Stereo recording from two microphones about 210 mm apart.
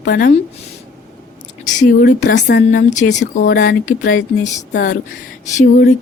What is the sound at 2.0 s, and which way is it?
Speech, 55° left (ahead or behind).